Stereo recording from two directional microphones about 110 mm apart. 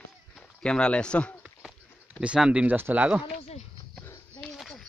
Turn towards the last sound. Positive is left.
turn(degrees=0)  # may be behind; listen again after turning